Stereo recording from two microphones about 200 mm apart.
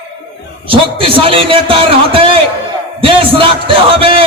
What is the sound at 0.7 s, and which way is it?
A man's voice, 25° right (ahead or behind).